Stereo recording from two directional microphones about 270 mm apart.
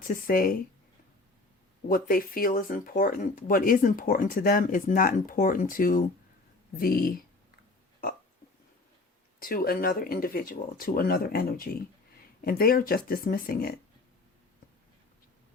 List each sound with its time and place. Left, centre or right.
0.0 s speech: left
1.9 s speech: left
9.4 s speech: left